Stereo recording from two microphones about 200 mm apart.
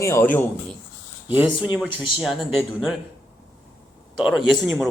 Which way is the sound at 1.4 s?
25° left (ahead or behind).